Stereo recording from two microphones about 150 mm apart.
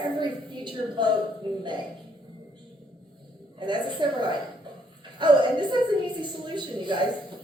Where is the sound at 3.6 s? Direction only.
30° right (ahead or behind).